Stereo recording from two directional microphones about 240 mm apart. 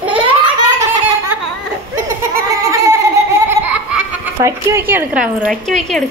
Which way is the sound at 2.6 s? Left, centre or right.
Centre.